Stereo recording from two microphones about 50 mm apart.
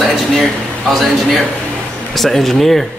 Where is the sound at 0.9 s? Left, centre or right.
Centre.